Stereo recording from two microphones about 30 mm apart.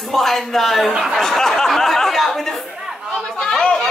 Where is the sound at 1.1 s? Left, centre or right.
Centre.